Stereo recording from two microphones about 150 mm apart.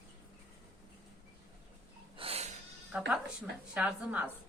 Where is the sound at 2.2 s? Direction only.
45° right (ahead or behind).